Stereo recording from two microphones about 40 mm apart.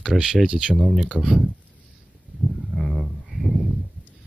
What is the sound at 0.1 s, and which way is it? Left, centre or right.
Speech, centre.